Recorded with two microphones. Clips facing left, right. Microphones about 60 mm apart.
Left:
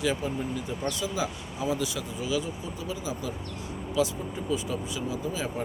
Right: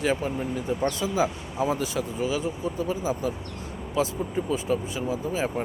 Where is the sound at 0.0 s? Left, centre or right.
Right.